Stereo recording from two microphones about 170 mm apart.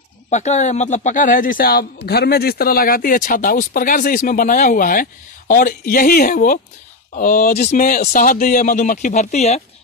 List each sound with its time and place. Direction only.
0.3 s speech: 45° left (ahead or behind)